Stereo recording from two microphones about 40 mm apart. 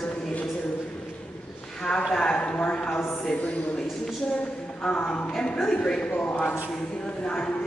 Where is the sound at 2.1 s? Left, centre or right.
Centre.